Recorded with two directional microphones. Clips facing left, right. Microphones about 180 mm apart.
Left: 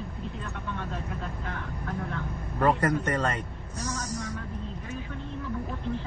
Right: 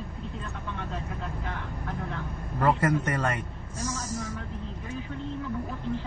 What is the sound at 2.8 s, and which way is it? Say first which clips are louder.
Speech: even; 10° right (ahead or behind).